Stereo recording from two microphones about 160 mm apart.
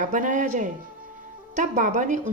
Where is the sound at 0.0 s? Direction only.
50° right (ahead or behind).